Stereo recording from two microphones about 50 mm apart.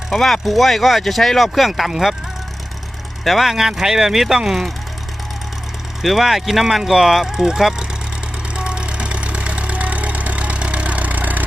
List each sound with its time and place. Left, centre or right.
0.1 s speech: centre
3.2 s speech: centre
6.0 s speech: centre
8.5 s vehicle: centre